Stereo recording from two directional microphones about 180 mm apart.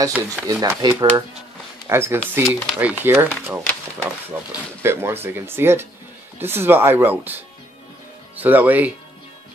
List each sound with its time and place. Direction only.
0.5 s speech: 20° right (ahead or behind)